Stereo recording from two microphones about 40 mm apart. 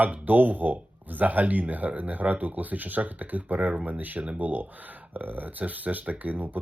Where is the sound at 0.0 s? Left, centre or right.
Right.